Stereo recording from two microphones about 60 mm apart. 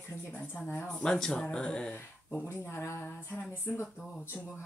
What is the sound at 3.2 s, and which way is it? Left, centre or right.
Speech, left.